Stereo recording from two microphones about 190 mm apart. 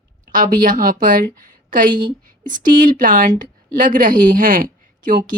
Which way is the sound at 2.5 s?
45° right (ahead or behind).